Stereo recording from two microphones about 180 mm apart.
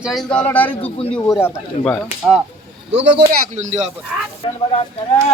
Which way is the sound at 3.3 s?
40° right (ahead or behind).